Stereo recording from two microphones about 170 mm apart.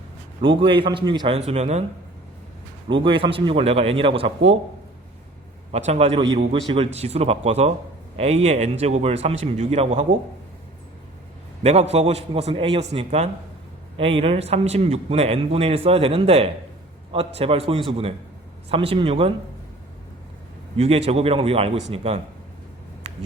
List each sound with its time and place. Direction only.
0.4 s a man's voice: 30° right (ahead or behind)
1.4 s speech: 40° right (ahead or behind)
2.9 s speech: 30° right (ahead or behind)
5.7 s speech: 40° right (ahead or behind)
11.6 s speech: 40° right (ahead or behind)
20.7 s speech: 35° right (ahead or behind)